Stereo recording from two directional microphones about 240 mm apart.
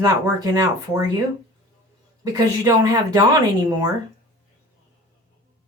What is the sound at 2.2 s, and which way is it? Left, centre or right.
Speech, centre.